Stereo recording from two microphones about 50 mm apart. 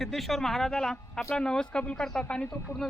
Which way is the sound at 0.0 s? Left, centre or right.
Centre.